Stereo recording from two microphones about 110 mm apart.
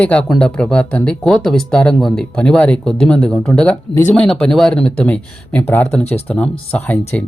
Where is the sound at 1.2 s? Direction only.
5° left (ahead or behind).